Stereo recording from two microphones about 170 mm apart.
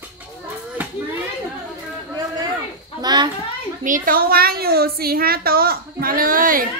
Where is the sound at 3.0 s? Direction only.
25° right (ahead or behind).